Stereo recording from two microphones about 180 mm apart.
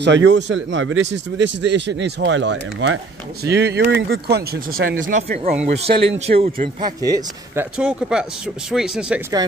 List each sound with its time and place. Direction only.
0.0 s speech: 80° right
0.7 s speech: 90° right
3.4 s a man's voice: 70° right (ahead or behind); by 6.9 s 35° right (ahead or behind)
7.0 s speech: 20° right (ahead or behind)
7.7 s speech: 5° right (ahead or behind)